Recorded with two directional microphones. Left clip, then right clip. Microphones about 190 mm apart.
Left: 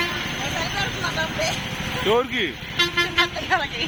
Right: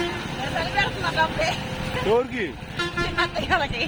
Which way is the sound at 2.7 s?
55° right (ahead or behind).